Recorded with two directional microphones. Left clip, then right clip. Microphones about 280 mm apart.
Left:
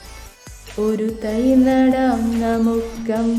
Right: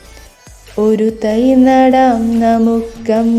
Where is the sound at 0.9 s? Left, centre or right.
Right.